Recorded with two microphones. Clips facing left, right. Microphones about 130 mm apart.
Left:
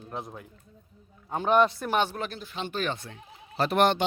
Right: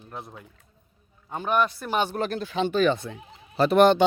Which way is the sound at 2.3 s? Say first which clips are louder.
Right 10 dB; 85° right.